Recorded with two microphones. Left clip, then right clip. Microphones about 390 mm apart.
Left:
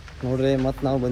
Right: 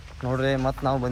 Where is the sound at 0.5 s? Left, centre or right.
Centre.